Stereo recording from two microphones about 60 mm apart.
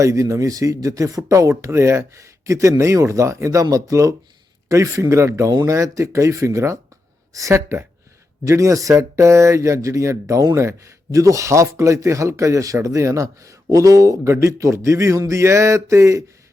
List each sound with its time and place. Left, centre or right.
0.0 s speech: right
5.5 s speech: right
8.4 s speech: right
14.3 s speech: right